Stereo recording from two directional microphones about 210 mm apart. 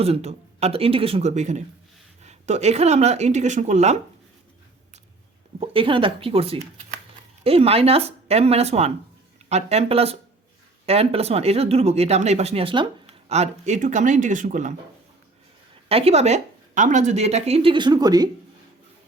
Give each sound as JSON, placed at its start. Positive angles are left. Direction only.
{"t": 0.0, "sound": "speech", "side_deg": -30}
{"t": 5.5, "sound": "speech", "side_deg": -25}
{"t": 15.9, "sound": "speech", "side_deg": -30}